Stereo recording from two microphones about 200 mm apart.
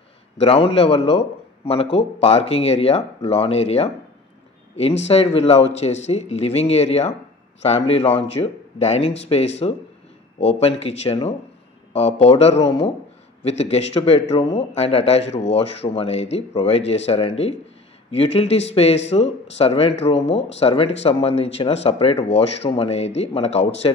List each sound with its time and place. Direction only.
0.4 s a man's voice: 30° left (ahead or behind)
5.0 s a man's voice: 30° left (ahead or behind)